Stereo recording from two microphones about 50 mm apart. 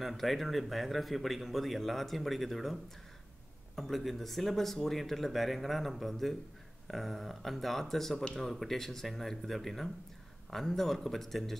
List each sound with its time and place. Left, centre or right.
0.0 s a man's voice: centre
8.2 s speech: centre
8.5 s a man's voice: centre